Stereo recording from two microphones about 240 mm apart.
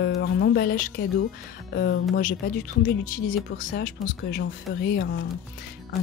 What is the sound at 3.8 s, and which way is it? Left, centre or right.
Speech, left.